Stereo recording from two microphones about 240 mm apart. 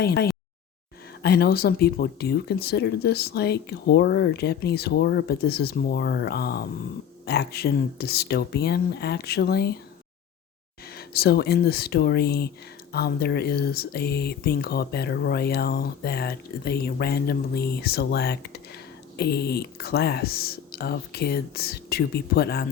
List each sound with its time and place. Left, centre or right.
0.0 s speech: left
10.9 s speech: left